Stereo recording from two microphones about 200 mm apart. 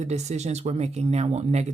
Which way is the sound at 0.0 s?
35° right (ahead or behind).